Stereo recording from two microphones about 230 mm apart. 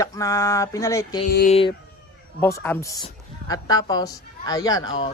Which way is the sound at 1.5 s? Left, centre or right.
Left.